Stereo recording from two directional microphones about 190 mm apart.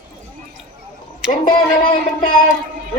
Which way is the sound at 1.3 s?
45° left (ahead or behind).